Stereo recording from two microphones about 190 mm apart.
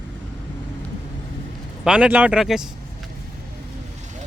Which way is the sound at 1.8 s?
5° right (ahead or behind).